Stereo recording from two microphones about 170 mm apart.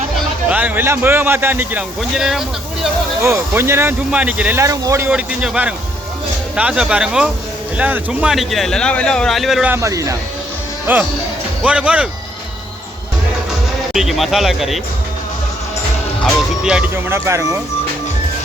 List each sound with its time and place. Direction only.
0.4 s speech: 10° right (ahead or behind)
3.2 s speech: 15° right (ahead or behind)
9.7 s speech: 15° right (ahead or behind)
13.9 s speech: centre (ahead or behind)
16.2 s speech: 5° right (ahead or behind)